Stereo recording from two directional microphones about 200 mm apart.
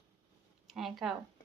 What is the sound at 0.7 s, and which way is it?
Speech, centre (ahead or behind).